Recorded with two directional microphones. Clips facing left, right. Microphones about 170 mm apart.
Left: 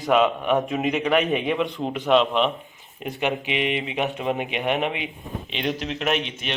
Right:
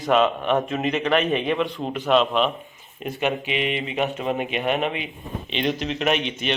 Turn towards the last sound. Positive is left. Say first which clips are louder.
# right 2 dB
turn(degrees=0)  # may be behind; listen again after turning